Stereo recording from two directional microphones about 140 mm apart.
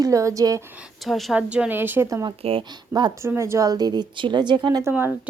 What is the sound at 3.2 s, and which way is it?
A woman's voice, 20° right (ahead or behind).